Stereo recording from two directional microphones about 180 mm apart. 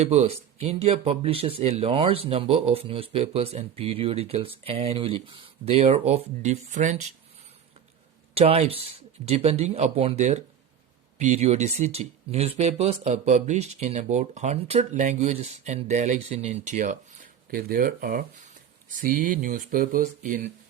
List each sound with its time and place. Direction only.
0.0 s speech: 35° right (ahead or behind)
8.4 s speech: 35° right (ahead or behind)